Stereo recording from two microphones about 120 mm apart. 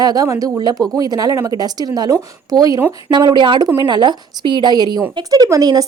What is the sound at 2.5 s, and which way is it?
A woman's voice, 30° right (ahead or behind).